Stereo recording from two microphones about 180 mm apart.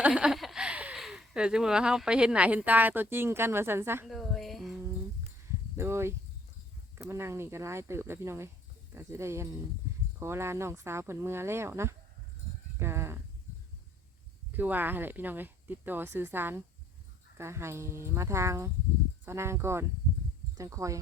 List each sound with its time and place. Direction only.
0.0 s speech: 5° right (ahead or behind)
4.0 s music: centre (ahead or behind)
5.7 s a sound: 15° right (ahead or behind)
7.0 s speech: 15° right (ahead or behind)
14.5 s speech: 10° right (ahead or behind)